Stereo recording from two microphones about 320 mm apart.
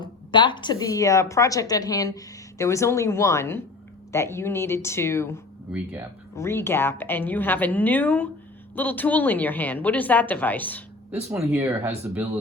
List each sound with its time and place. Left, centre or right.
0.0 s speech: centre
5.7 s a woman's voice: centre
6.3 s a woman's voice: centre
11.3 s a woman's voice: centre